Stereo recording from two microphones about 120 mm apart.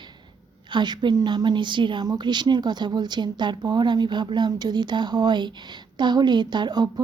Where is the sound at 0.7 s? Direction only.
40° right (ahead or behind).